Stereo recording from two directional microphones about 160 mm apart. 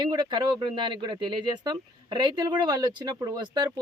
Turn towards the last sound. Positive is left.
turn(degrees=-25)  # may be behind; listen again after turning